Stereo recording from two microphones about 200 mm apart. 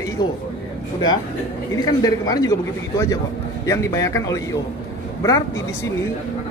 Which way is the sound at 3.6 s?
15° left (ahead or behind).